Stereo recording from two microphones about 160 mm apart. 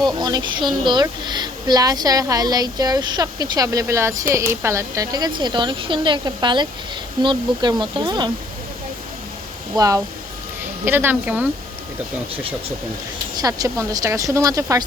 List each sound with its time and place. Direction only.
0.0 s a woman's voice: 25° right (ahead or behind)
9.7 s a woman's voice: 20° right (ahead or behind)
13.3 s a woman's voice: 20° right (ahead or behind)